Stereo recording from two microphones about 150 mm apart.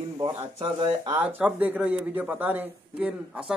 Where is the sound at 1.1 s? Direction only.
10° right (ahead or behind).